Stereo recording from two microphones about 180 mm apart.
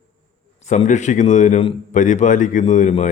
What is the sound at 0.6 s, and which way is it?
A man's voice, 40° left (ahead or behind).